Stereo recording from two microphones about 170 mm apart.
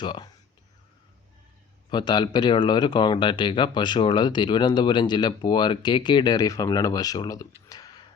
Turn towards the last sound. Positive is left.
turn(degrees=20)  # may be behind; listen again after turning